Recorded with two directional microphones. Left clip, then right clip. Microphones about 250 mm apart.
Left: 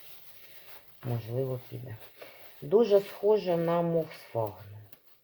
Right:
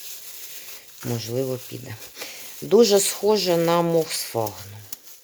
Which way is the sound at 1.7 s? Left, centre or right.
Right.